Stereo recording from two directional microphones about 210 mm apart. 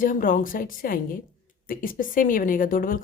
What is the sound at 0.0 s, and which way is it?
Speech, 40° left (ahead or behind).